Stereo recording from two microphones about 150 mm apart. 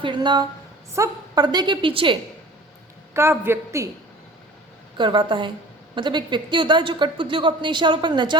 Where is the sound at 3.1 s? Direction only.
15° right (ahead or behind).